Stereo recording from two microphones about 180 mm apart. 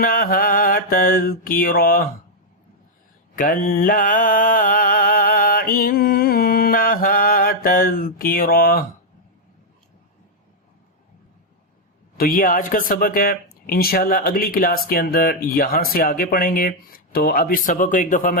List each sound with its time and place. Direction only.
0.0 s speech: 55° left (ahead or behind)
3.3 s mantra: 50° left (ahead or behind)
12.1 s speech: 55° left (ahead or behind)